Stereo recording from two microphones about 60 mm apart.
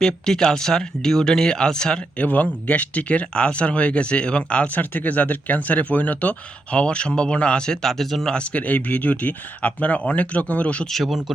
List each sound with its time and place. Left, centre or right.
0.0 s speech: centre
2.2 s speech: left; by 8.4 s centre
8.4 s speech: left
10.9 s speech: centre